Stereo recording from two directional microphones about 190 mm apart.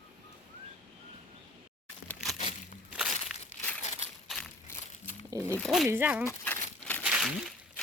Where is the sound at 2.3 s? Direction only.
35° left (ahead or behind).